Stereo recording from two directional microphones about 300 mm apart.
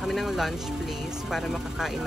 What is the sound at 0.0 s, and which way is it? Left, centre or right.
Speech, centre.